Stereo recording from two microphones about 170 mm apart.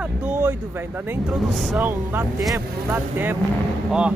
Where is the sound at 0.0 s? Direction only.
10° right (ahead or behind).